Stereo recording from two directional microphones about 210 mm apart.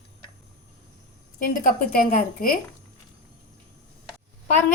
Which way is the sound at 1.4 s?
40° left (ahead or behind).